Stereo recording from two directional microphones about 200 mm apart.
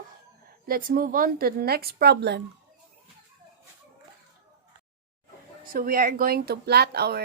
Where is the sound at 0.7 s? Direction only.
45° right (ahead or behind).